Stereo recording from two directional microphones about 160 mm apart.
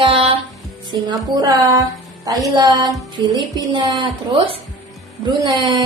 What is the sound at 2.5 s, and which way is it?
Speech, 20° right (ahead or behind).